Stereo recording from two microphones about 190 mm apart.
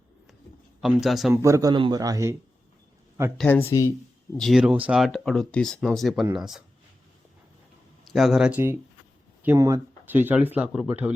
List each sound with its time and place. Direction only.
0.8 s speech: centre (ahead or behind)
1.3 s speech: 15° right (ahead or behind)
3.3 s speech: 10° left (ahead or behind)
4.4 s speech: centre (ahead or behind)
8.1 s speech: centre (ahead or behind)